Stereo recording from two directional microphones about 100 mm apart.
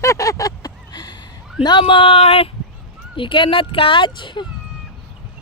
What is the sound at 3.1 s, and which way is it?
Speech, 55° left (ahead or behind).